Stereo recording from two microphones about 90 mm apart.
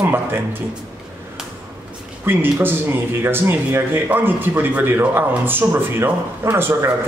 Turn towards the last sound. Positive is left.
turn(degrees=-25)  # may be behind; listen again after turning